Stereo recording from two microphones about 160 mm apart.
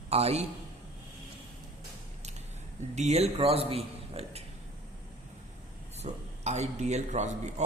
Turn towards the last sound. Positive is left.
turn(degrees=-45)  # may be behind; listen again after turning